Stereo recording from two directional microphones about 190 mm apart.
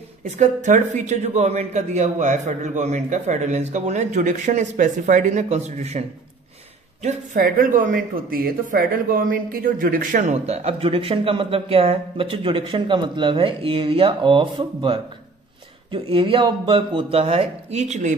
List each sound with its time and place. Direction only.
0.2 s speech: 40° right (ahead or behind)